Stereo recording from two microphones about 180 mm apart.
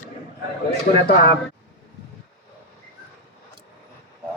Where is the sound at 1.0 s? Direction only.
55° left (ahead or behind).